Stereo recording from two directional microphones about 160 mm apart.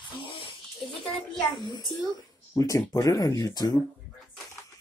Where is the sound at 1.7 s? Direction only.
25° left (ahead or behind).